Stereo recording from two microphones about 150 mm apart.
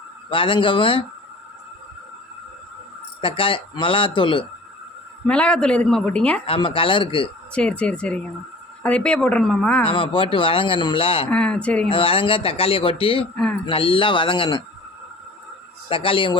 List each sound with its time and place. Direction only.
0.3 s speech: 35° left (ahead or behind)
3.2 s speech: 35° left (ahead or behind)
5.2 s a woman's voice: 5° left (ahead or behind)
6.4 s speech: 35° left (ahead or behind)
7.5 s a woman's voice: 5° left (ahead or behind)
9.8 s speech: 35° left (ahead or behind)
11.3 s a woman's voice: 5° left (ahead or behind)
11.9 s speech: 35° left (ahead or behind)
13.3 s speech: 5° left (ahead or behind)
13.7 s speech: 35° left (ahead or behind)
15.9 s speech: 35° left (ahead or behind)